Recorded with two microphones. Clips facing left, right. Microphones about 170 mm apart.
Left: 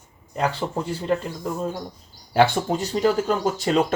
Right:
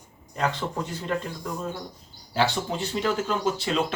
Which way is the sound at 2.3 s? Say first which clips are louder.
Left 6 dB; 55° left (ahead or behind).